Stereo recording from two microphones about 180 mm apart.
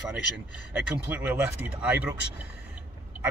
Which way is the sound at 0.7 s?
10° right (ahead or behind).